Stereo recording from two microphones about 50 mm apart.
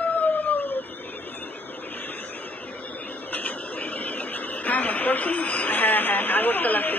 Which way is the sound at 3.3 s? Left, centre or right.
Left.